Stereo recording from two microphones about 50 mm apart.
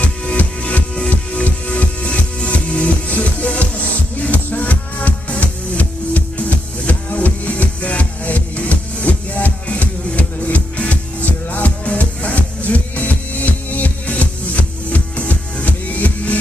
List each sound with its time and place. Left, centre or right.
0.0 s music: left